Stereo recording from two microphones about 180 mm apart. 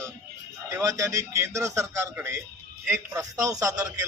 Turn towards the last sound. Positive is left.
turn(degrees=-20)  # may be behind; listen again after turning